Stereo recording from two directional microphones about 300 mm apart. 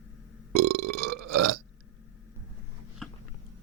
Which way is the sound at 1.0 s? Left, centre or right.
Right.